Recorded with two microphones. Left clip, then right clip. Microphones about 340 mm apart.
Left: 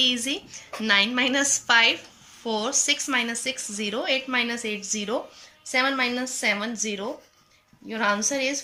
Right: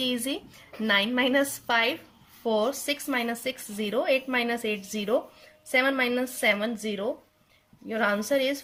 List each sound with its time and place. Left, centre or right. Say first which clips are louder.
0.0 s a woman's voice: left 6 dB; right